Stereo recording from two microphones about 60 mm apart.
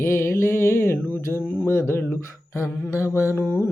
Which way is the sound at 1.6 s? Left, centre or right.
Left.